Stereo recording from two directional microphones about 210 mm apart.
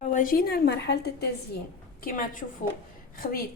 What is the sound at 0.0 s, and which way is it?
A woman's voice, 40° left (ahead or behind).